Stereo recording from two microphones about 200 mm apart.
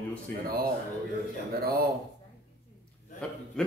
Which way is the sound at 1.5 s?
50° right (ahead or behind).